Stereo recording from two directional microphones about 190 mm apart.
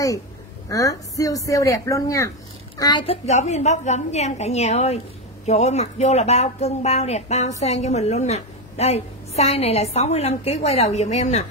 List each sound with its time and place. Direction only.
0.7 s a woman's voice: 15° left (ahead or behind); by 11.4 s 35° left (ahead or behind)